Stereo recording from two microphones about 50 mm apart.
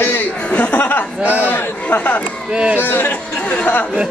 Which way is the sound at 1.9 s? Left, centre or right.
Left.